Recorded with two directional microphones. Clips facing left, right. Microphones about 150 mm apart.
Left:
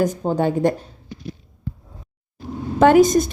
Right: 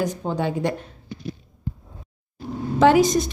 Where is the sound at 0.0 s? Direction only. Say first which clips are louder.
Left 5 dB; 50° left (ahead or behind).